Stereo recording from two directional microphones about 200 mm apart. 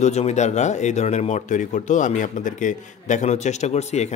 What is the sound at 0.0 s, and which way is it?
Speech, 35° left (ahead or behind).